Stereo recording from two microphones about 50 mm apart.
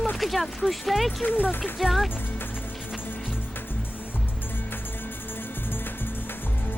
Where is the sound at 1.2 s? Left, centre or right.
Left.